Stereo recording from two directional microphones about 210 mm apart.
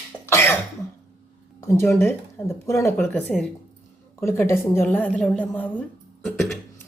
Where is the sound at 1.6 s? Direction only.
10° left (ahead or behind).